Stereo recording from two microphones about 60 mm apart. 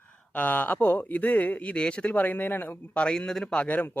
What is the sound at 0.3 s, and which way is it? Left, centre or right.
Speech, left.